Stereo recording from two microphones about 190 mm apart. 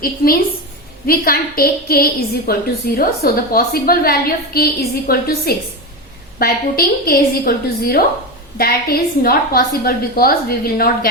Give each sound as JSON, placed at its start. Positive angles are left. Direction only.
{"t": 0.2, "sound": "a woman's voice", "side_deg": 50}